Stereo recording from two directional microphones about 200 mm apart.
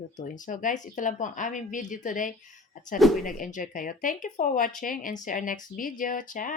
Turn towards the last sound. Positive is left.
turn(degrees=40)  # may be behind; listen again after turning